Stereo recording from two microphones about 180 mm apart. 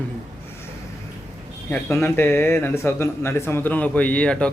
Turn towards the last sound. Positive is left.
turn(degrees=5)  # may be behind; listen again after turning